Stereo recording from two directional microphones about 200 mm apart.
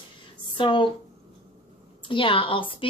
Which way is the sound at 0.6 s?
25° left (ahead or behind).